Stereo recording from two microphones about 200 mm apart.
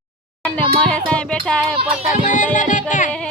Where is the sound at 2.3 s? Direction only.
40° left (ahead or behind).